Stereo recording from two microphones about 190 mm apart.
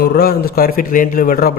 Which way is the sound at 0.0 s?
55° left (ahead or behind).